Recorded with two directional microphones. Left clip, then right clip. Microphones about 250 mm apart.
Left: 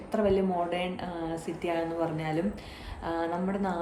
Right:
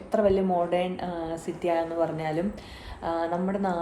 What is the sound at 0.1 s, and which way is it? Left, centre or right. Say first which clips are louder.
A woman's voice: right 4 dB; centre.